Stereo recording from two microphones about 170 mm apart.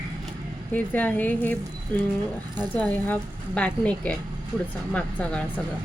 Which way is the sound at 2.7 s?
10° left (ahead or behind).